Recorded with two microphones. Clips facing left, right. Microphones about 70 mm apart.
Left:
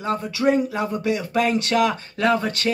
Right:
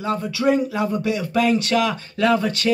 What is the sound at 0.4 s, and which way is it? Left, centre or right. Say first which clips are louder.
Speech: right 1 dB; centre.